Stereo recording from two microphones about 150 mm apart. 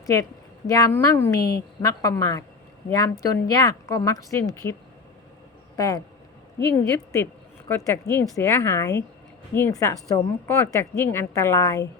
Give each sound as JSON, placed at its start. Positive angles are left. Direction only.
{"t": 0.0, "sound": "a woman's voice", "side_deg": 25}